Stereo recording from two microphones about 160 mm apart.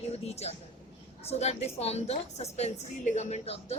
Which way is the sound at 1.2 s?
45° left (ahead or behind).